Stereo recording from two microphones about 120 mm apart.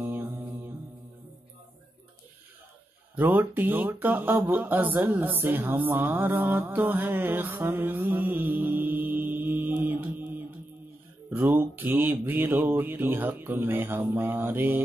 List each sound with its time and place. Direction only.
0.0 s mantra: 15° right (ahead or behind)
3.2 s mantra: 15° right (ahead or behind)
4.5 s speech: 15° right (ahead or behind)
11.2 s mantra: 15° right (ahead or behind)